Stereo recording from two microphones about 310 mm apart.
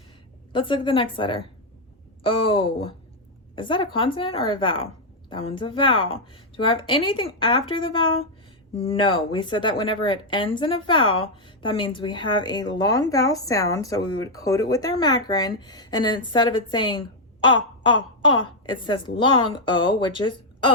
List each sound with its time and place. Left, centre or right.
0.5 s a woman's voice: centre
2.4 s a woman's voice: centre
17.4 s a sound: centre
18.2 s a woman's voice: centre